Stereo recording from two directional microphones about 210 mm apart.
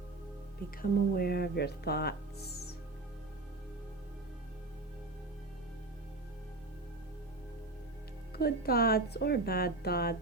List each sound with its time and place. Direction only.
0.8 s speech: 45° left (ahead or behind)
8.4 s speech: 45° left (ahead or behind)